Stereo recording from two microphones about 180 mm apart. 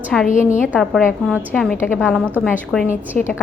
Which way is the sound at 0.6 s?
Centre (ahead or behind).